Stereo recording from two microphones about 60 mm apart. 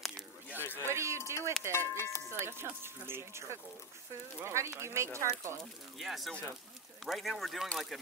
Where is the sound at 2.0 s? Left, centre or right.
Left.